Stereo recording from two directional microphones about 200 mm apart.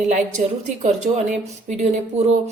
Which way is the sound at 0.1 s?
35° right (ahead or behind).